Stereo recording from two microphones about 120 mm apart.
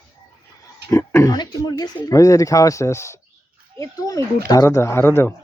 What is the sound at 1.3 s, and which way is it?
Speech, 35° left (ahead or behind).